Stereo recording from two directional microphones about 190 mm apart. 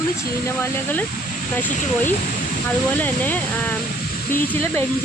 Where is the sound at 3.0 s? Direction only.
10° left (ahead or behind).